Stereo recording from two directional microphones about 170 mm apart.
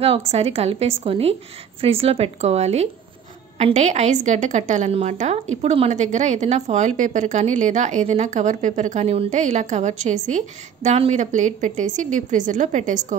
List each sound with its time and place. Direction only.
0.3 s a woman's voice: 35° right (ahead or behind)